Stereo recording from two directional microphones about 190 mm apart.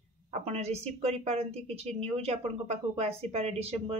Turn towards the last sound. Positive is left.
turn(degrees=-30)  # may be behind; listen again after turning